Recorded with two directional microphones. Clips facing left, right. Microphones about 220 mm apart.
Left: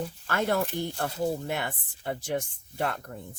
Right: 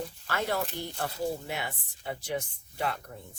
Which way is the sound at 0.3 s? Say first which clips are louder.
Left 4 dB; 50° left (ahead or behind).